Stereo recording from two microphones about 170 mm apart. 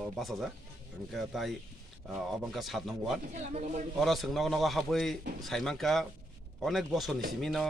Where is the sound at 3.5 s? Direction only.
40° right (ahead or behind).